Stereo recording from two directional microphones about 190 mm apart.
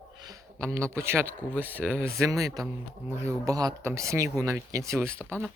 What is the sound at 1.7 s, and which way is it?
Speech, 10° right (ahead or behind).